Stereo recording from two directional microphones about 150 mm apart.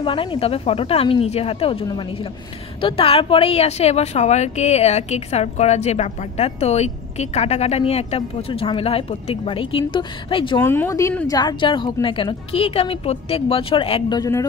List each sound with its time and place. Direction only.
0.0 s a woman's voice: 35° left (ahead or behind)
10.6 s a woman's voice: 15° left (ahead or behind); by 14.1 s 35° left (ahead or behind)
14.1 s speech: 25° left (ahead or behind)